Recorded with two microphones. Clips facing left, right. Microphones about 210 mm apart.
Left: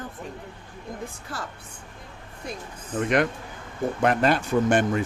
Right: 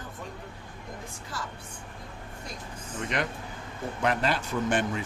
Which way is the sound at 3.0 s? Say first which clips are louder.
Left 9 dB; 55° left (ahead or behind).